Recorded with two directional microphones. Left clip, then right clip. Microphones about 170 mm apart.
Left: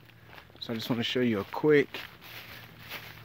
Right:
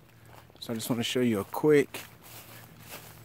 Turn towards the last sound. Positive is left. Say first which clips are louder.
# left 5 dB
turn(degrees=0)  # may be behind; listen again after turning